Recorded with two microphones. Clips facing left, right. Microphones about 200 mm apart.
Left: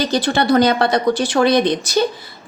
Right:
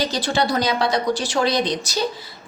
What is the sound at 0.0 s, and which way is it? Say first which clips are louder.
A woman's voice: left 4 dB; 55° left (ahead or behind).